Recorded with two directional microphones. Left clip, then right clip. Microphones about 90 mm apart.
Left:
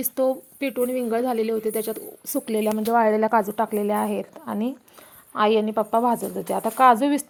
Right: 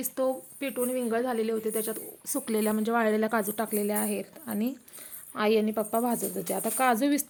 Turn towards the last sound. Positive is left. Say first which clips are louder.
# left 9 dB
turn(degrees=-5)  # may be behind; listen again after turning